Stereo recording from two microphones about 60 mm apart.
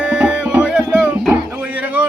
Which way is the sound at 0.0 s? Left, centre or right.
Centre.